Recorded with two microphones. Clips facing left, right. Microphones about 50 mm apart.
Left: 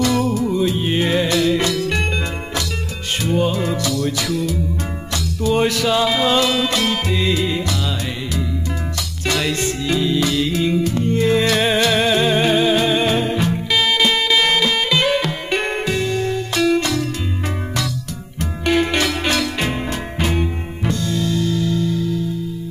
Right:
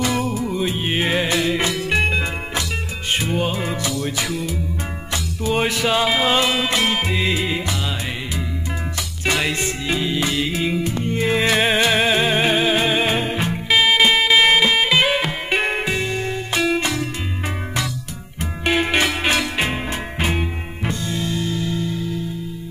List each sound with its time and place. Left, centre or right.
0.0 s music: centre
9.2 s music: centre
18.7 s music: centre